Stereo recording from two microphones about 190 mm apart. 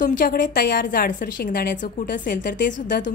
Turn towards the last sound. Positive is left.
turn(degrees=45)  # may be behind; listen again after turning